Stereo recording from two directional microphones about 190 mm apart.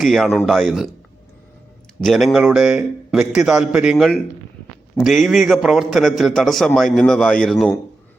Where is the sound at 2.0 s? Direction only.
Centre (ahead or behind).